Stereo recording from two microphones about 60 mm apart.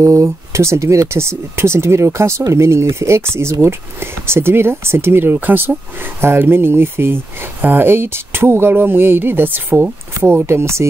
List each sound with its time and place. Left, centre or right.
0.0 s speech: right
6.2 s speech: right
10.4 s speech: right